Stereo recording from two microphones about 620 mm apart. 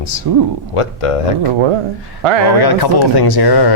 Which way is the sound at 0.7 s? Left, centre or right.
Left.